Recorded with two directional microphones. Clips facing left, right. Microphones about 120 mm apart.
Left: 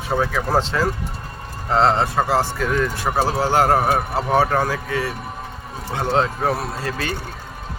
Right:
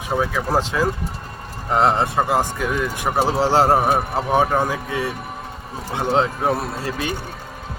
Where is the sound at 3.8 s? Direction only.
Centre (ahead or behind).